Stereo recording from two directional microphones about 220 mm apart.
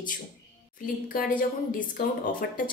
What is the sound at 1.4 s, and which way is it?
Speech, 40° left (ahead or behind).